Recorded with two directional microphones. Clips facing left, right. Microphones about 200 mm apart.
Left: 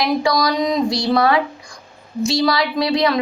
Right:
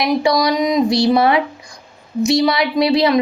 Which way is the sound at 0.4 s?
10° right (ahead or behind).